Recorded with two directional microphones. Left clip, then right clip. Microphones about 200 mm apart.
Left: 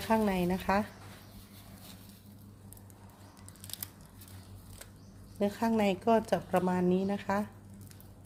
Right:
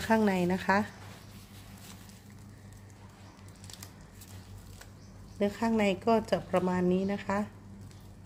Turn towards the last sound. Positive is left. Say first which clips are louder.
# even
turn(degrees=0)  # may be behind; listen again after turning